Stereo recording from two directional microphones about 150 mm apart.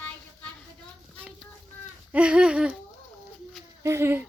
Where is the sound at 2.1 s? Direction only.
5° right (ahead or behind).